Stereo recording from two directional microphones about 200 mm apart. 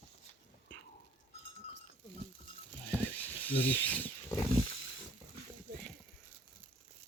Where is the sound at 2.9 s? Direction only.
10° left (ahead or behind).